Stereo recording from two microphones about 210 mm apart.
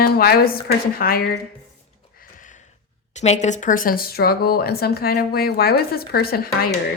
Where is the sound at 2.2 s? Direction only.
35° left (ahead or behind).